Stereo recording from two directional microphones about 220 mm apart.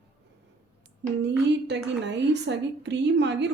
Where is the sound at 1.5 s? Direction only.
50° right (ahead or behind).